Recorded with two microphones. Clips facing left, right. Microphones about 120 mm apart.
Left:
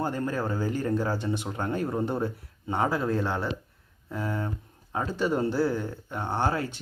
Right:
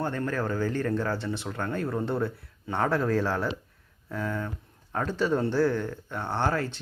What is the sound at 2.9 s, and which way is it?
Speech, centre (ahead or behind).